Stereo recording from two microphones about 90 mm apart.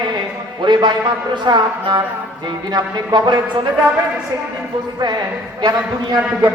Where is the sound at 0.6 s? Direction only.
60° right (ahead or behind).